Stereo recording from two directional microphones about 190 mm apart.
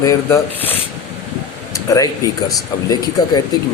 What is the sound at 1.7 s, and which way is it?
Speech, 15° left (ahead or behind).